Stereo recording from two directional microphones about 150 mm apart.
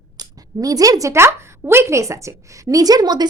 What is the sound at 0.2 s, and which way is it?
A woman's voice, 25° right (ahead or behind).